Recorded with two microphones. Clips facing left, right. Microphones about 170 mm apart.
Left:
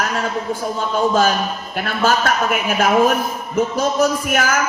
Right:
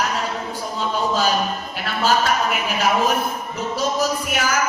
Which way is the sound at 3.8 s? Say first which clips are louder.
Left 1 dB; 50° left (ahead or behind).